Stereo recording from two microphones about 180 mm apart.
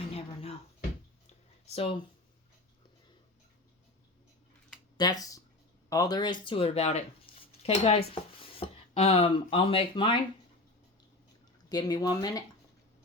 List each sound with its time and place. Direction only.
1.7 s speech: 30° left (ahead or behind)
4.9 s speech: 20° left (ahead or behind)
11.7 s speech: 20° left (ahead or behind)